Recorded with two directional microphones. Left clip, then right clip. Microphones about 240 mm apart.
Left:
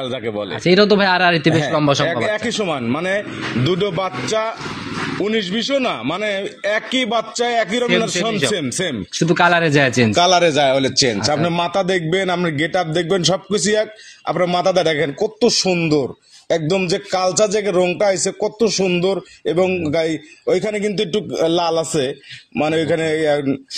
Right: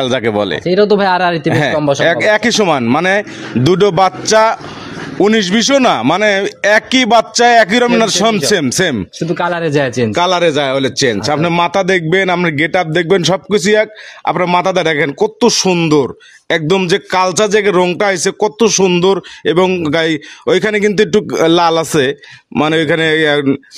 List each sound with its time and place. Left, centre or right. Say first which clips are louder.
0.0 s a man's voice: right 10 dB; right
0.8 s speech: right 3 dB; right
1.8 s a man's voice: right 3 dB; centre
2.2 s a man's voice: right 9 dB; right
9.2 s speech: left 2 dB; centre
9.6 s a man's voice: right 1 dB; centre
11.1 s a man's voice: right 5 dB; right